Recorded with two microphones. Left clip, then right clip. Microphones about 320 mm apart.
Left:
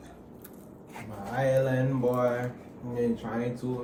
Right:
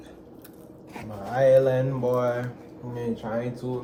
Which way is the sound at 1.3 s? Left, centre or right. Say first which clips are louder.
Right 7 dB; right.